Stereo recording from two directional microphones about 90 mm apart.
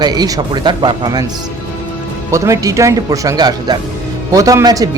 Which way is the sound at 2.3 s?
35° right (ahead or behind).